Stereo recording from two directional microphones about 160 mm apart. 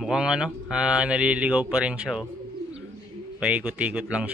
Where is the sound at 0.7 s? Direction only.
5° right (ahead or behind).